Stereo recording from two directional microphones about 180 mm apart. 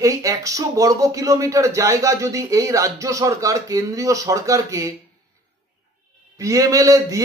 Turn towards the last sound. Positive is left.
turn(degrees=-20)  # may be behind; listen again after turning